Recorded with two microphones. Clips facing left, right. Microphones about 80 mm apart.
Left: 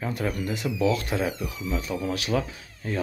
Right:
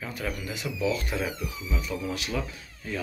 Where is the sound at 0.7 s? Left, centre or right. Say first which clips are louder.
Left 3 dB; left.